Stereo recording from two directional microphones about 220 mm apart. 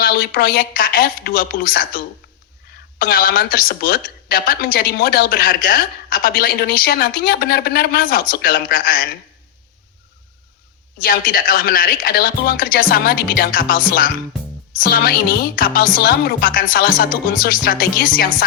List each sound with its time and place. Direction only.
0.0 s a woman's voice: 40° left (ahead or behind)
3.0 s a woman's voice: 40° left (ahead or behind)
10.9 s a woman's voice: 40° left (ahead or behind)